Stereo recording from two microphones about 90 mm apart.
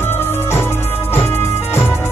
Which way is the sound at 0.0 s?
25° left (ahead or behind).